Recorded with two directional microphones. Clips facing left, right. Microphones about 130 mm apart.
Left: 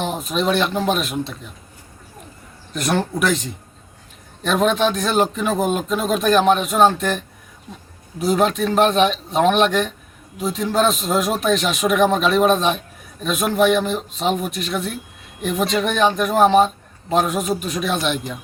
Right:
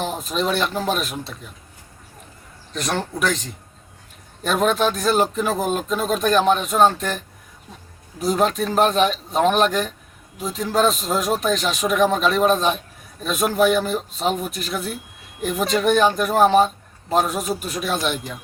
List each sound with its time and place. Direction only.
0.0 s speech: centre (ahead or behind)
2.7 s speech: 10° left (ahead or behind)
4.4 s speech: centre (ahead or behind)
8.2 s speech: centre (ahead or behind)